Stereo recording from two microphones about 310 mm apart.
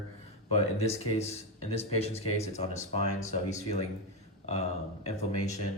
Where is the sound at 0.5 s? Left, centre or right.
Centre.